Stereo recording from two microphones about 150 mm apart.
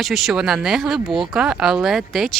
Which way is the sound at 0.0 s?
Centre (ahead or behind).